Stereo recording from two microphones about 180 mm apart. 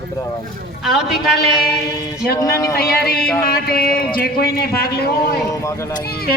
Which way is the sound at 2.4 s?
15° left (ahead or behind).